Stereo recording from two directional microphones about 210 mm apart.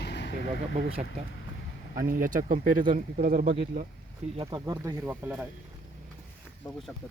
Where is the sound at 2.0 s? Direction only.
40° right (ahead or behind).